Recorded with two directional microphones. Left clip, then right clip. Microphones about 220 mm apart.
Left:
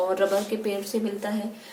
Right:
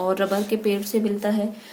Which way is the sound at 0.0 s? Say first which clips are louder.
Right 1 dB; 50° right (ahead or behind).